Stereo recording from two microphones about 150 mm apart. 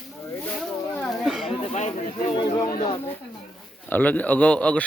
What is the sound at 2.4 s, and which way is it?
Speech, 25° left (ahead or behind).